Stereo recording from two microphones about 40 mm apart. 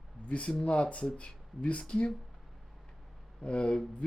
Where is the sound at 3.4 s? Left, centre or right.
Left.